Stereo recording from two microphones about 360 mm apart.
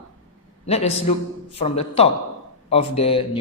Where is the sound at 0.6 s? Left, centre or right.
Centre.